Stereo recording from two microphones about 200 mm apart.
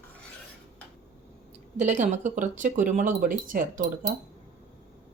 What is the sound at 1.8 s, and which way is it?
Speech, 35° right (ahead or behind).